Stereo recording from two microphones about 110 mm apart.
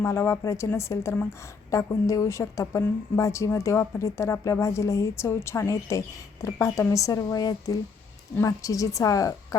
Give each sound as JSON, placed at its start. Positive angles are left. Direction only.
{"t": 0.0, "sound": "a woman's voice", "side_deg": 25}